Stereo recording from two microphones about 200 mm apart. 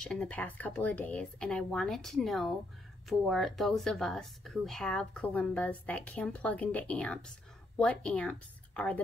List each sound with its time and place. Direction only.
0.0 s speech: 5° left (ahead or behind)